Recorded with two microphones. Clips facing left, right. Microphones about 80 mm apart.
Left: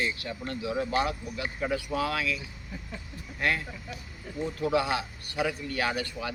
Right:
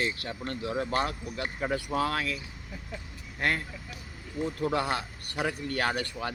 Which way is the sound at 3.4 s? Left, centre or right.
Right.